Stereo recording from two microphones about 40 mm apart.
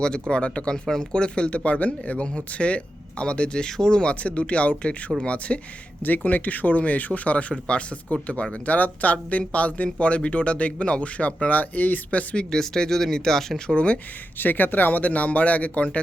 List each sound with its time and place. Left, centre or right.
0.0 s speech: left
6.0 s speech: left
8.5 s speech: left
12.5 s speech: centre
13.7 s speech: left
14.3 s speech: left